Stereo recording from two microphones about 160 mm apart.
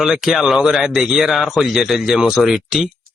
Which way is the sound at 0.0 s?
Centre (ahead or behind).